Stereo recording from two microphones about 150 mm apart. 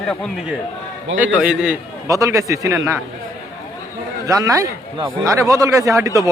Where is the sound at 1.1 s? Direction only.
10° right (ahead or behind).